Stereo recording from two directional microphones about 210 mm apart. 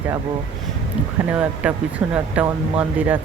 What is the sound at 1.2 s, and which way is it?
Speech, 10° right (ahead or behind).